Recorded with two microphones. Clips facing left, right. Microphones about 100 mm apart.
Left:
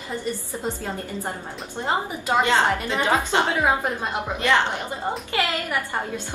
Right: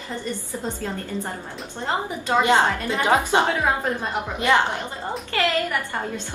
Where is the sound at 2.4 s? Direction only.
20° right (ahead or behind).